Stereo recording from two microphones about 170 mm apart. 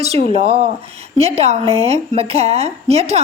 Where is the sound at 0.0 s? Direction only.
35° right (ahead or behind).